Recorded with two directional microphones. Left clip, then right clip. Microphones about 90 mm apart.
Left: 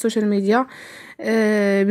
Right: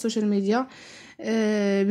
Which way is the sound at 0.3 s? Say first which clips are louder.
Left 6 dB; 40° left (ahead or behind).